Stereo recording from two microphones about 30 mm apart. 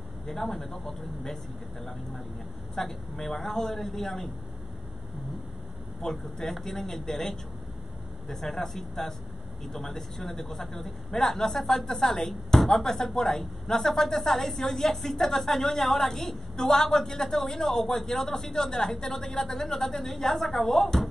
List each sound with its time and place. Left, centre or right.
0.3 s a man's voice: centre
2.7 s a man's voice: centre
6.0 s a man's voice: centre
16.5 s a man's voice: left